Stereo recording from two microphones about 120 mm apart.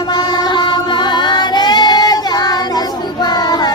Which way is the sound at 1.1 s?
40° left (ahead or behind).